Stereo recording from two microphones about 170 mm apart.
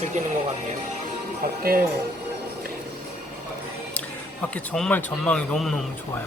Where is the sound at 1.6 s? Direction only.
60° right (ahead or behind).